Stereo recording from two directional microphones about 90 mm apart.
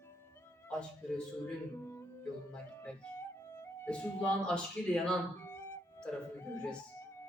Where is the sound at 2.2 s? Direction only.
10° left (ahead or behind).